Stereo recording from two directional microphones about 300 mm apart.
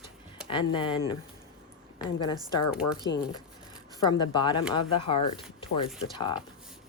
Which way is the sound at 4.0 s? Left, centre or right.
Centre.